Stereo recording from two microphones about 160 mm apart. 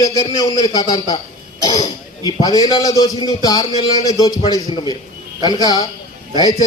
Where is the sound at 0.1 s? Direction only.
25° left (ahead or behind).